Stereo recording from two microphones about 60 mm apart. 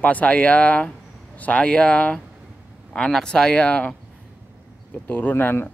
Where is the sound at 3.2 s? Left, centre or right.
Centre.